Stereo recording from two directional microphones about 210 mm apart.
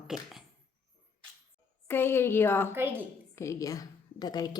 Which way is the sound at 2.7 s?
10° right (ahead or behind).